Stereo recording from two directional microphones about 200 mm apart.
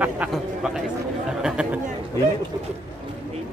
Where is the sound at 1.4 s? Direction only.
5° right (ahead or behind).